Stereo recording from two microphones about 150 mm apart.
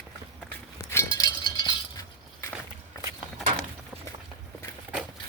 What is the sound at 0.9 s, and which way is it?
Chink, 20° left (ahead or behind).